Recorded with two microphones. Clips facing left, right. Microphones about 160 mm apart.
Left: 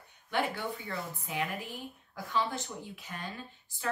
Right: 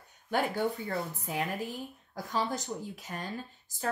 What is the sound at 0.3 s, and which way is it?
A woman's voice, 45° right (ahead or behind).